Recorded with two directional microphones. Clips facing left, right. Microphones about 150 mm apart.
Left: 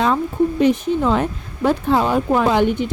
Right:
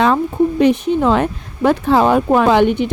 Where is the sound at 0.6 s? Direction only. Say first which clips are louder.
Right 3 dB; 70° right (ahead or behind).